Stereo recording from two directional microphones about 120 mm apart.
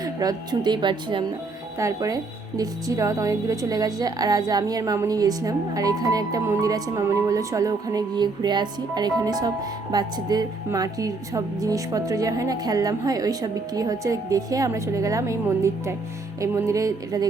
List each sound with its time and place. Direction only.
0.0 s speech: 35° right (ahead or behind)
1.8 s a woman's voice: 30° right (ahead or behind)